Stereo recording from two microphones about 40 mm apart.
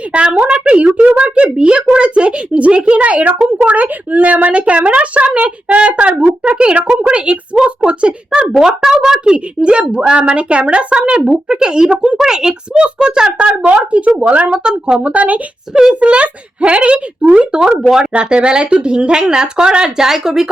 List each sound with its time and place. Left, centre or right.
0.1 s a woman's voice: right
9.6 s a woman's voice: right
13.7 s a woman's voice: right
14.6 s a woman's voice: centre
15.0 s a woman's voice: right
15.7 s a woman's voice: centre
16.0 s a woman's voice: right; by 20.5 s centre